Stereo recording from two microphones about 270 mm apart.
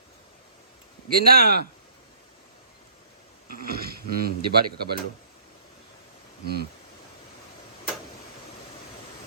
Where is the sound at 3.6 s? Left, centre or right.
Right.